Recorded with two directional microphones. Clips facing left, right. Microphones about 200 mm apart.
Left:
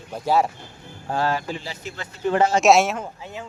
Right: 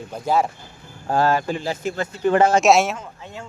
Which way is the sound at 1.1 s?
50° right (ahead or behind).